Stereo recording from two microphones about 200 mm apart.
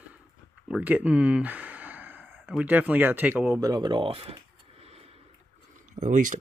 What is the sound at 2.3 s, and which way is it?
Speech, centre (ahead or behind).